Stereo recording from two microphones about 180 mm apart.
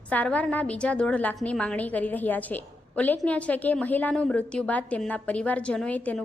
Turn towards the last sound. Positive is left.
turn(degrees=10)  # may be behind; listen again after turning